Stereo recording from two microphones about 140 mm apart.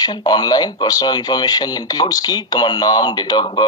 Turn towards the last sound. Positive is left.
turn(degrees=30)  # may be behind; listen again after turning